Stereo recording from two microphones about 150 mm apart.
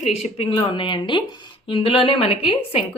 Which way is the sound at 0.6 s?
30° left (ahead or behind).